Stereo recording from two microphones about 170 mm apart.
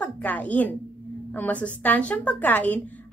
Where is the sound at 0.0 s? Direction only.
10° left (ahead or behind).